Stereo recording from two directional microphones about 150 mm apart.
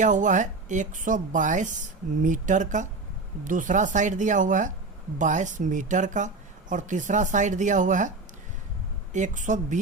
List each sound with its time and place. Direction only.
0.0 s speech: 55° right (ahead or behind)
9.1 s speech: 55° right (ahead or behind)